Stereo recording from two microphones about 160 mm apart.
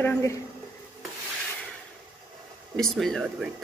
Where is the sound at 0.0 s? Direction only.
20° left (ahead or behind).